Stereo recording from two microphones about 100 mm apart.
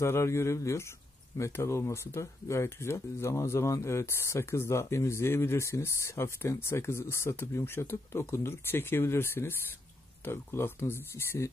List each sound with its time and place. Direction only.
0.0 s speech: 25° left (ahead or behind)